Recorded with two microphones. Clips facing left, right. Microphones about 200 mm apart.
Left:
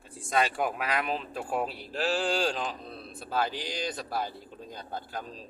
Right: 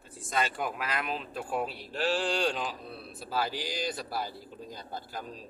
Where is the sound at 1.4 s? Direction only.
40° left (ahead or behind).